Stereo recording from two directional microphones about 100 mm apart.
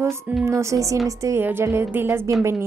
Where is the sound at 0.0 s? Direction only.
25° right (ahead or behind).